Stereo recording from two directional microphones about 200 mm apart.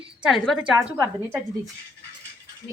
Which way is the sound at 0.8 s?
15° right (ahead or behind).